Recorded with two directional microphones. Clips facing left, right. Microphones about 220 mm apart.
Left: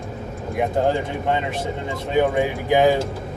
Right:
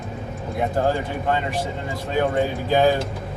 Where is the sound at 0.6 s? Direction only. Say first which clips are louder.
Left 2 dB; 15° left (ahead or behind).